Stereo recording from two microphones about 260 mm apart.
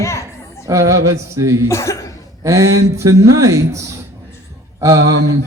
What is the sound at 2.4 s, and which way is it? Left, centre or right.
Speech, centre.